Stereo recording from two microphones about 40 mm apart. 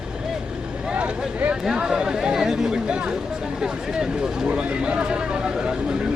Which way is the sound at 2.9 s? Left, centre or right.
Right.